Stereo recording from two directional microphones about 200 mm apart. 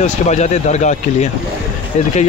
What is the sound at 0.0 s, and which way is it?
Speech, 35° left (ahead or behind).